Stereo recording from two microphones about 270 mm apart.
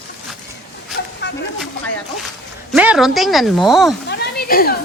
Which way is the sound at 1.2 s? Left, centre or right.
Left.